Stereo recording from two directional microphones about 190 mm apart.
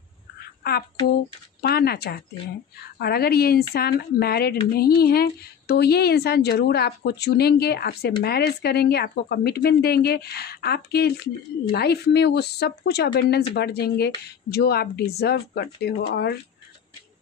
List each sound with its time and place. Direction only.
1.6 s speech: 55° left (ahead or behind)